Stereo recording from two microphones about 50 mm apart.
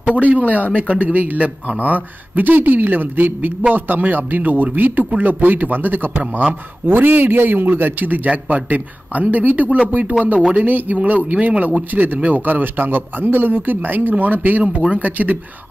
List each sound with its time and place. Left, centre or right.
0.0 s speech: right
14.6 s speech: right